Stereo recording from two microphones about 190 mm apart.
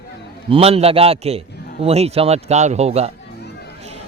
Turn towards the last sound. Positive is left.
turn(degrees=-35)  # may be behind; listen again after turning